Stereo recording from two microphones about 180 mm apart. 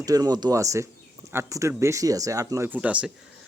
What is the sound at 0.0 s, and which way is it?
A man's voice, 20° right (ahead or behind).